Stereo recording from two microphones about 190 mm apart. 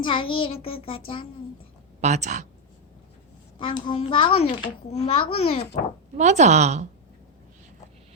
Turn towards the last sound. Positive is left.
turn(degrees=-35)  # may be behind; listen again after turning